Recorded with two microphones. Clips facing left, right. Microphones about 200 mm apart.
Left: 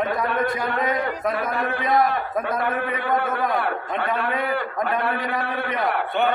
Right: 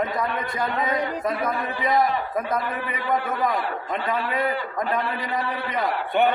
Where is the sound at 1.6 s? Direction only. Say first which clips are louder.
Left 3 dB; 60° left (ahead or behind).